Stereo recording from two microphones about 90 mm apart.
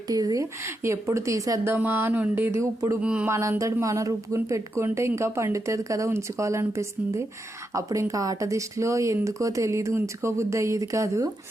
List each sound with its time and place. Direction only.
0.1 s a sound: 45° right (ahead or behind)
0.6 s speech: 30° right (ahead or behind)
1.6 s speech: 20° right (ahead or behind)
2.6 s speech: 35° right (ahead or behind)
3.0 s a sound: 10° right (ahead or behind)
3.2 s speech: 30° right (ahead or behind)